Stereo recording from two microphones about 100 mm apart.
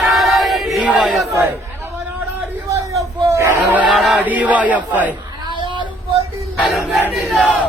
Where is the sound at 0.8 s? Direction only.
Centre (ahead or behind).